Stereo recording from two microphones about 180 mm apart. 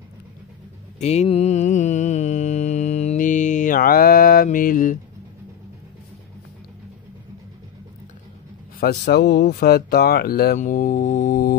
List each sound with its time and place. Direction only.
0.9 s mantra: 35° left (ahead or behind)
8.7 s speech: 60° left (ahead or behind)